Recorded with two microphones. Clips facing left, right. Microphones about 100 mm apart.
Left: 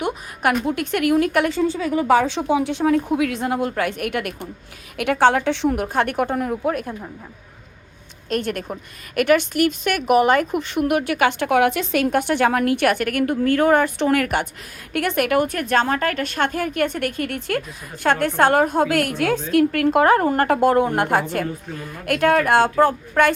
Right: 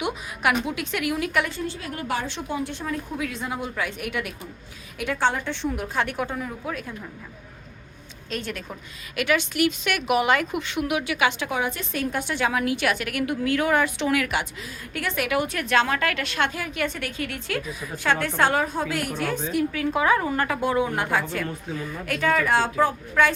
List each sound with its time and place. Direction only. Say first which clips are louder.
0.0 s a woman's voice: left 3 dB; 45° left (ahead or behind)
2.5 s a woman's voice: left 11 dB; 90° left; by 6.9 s 50° left (ahead or behind)
8.3 s a woman's voice: left 8 dB; 55° left (ahead or behind)